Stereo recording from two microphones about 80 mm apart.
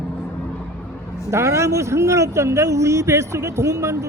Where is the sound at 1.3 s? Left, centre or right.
Right.